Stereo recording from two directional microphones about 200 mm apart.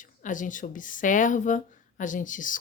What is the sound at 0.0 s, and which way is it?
Speech, 40° left (ahead or behind).